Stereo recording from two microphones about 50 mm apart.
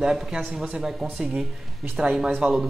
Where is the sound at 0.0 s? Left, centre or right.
Centre.